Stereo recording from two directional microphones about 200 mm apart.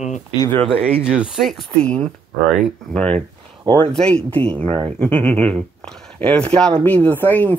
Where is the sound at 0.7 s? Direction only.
5° right (ahead or behind).